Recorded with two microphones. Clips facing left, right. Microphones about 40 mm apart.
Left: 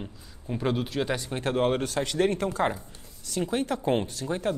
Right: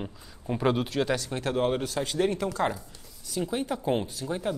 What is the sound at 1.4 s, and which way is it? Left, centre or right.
A woman's voice, left.